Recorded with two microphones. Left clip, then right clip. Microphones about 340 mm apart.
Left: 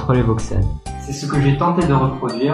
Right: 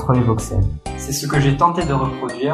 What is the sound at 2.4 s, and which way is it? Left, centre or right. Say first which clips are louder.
Speech: even; right.